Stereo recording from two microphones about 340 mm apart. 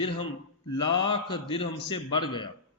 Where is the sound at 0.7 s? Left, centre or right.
Left.